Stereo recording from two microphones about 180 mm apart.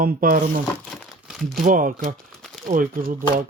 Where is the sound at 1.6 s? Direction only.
50° right (ahead or behind).